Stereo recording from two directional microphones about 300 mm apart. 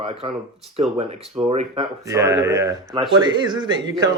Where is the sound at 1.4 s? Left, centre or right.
Centre.